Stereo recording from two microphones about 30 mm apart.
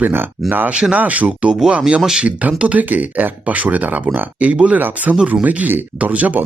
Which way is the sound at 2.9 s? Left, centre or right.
Right.